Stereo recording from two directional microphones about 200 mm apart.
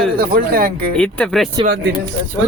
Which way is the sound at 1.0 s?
5° left (ahead or behind).